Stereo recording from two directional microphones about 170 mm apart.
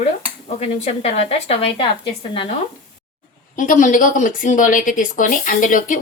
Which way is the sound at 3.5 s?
50° left (ahead or behind).